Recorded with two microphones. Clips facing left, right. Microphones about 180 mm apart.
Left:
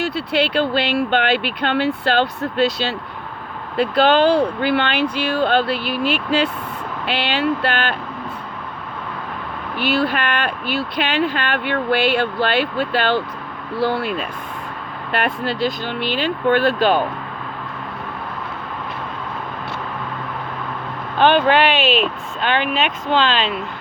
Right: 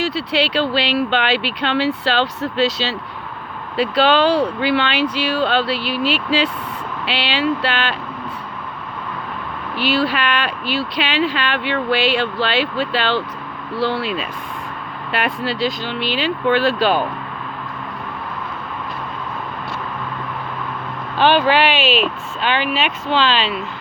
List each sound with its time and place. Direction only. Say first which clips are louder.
0.0 s speech: even; 55° left (ahead or behind)
10.1 s speech: right 1 dB; 50° left (ahead or behind)
21.2 s speech: even; 50° left (ahead or behind)
21.8 s speech: even; centre (ahead or behind)
22.4 s speech: even; 45° left (ahead or behind)